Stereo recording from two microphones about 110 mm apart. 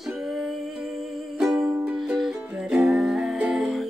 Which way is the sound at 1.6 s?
25° right (ahead or behind).